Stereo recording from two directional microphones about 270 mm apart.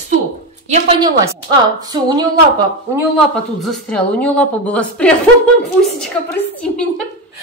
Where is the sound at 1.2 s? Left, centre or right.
Centre.